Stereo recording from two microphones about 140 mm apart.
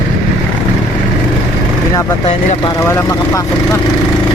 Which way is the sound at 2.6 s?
20° left (ahead or behind).